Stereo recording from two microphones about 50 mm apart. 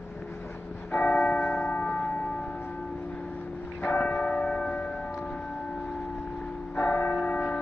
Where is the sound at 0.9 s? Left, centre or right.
Left.